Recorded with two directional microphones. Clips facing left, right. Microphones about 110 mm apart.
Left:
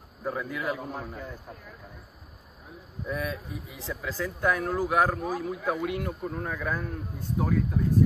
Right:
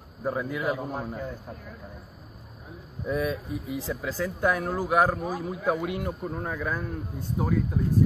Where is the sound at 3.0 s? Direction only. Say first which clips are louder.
Right 5 dB; 10° right (ahead or behind).